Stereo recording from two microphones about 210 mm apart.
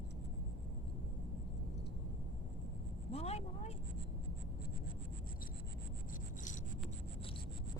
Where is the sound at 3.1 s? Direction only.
30° left (ahead or behind).